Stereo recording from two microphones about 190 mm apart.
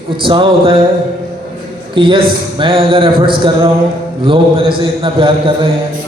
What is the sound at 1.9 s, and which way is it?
A man's voice, 25° right (ahead or behind).